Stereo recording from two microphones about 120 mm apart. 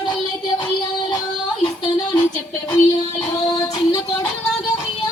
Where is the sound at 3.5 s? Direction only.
30° left (ahead or behind).